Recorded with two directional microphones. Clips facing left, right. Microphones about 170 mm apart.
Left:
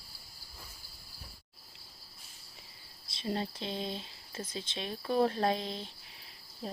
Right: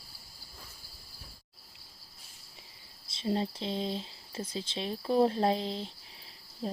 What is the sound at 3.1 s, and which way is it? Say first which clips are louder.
Speech: right 4 dB; 25° right (ahead or behind).